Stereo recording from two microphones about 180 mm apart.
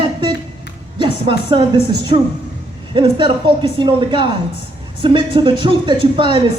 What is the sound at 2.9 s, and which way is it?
Speech, 25° right (ahead or behind).